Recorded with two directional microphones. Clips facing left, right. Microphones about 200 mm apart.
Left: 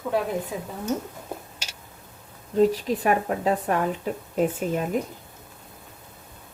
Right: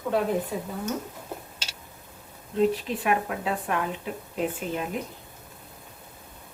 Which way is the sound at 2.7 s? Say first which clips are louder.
Left 3 dB; 40° left (ahead or behind).